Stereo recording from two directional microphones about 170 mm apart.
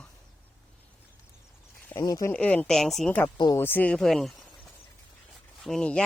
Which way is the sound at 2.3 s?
5° left (ahead or behind).